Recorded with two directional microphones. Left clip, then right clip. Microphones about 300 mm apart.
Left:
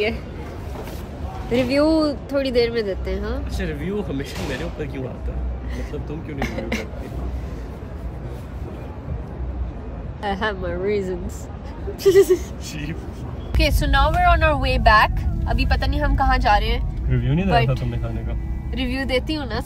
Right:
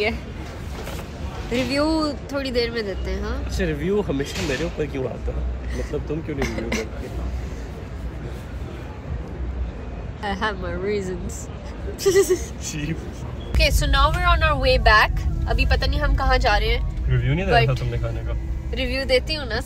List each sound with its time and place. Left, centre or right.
1.5 s speech: centre
3.5 s speech: centre
6.4 s speech: centre
10.2 s speech: centre
12.6 s speech: centre
13.5 s speech: centre
17.2 s speech: right
18.7 s speech: centre